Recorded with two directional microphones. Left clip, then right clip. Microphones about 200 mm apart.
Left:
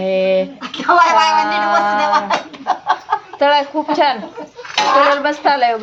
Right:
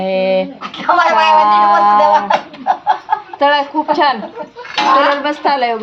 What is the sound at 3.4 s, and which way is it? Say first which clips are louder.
Speech: right 1 dB; 5° right (ahead or behind).